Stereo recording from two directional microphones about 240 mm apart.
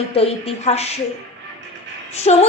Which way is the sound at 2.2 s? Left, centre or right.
Left.